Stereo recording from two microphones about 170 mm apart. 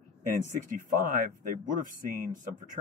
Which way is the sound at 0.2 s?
50° right (ahead or behind).